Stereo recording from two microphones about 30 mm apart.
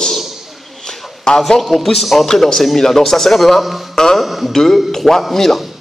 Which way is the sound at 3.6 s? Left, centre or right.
Centre.